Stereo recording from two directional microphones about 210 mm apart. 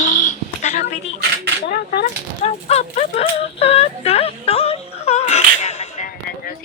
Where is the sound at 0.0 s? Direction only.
35° left (ahead or behind).